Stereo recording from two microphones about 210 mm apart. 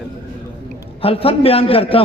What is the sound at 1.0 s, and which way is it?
Speech, 25° left (ahead or behind).